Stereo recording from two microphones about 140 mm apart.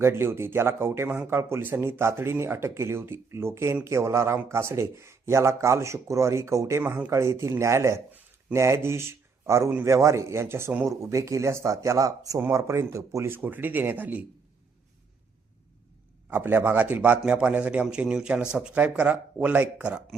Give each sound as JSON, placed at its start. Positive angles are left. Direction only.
{"t": 0.0, "sound": "speech", "side_deg": -15}
{"t": 16.3, "sound": "speech", "side_deg": -15}